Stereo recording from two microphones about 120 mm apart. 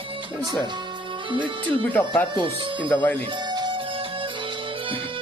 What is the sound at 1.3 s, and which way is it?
Speech, 45° right (ahead or behind).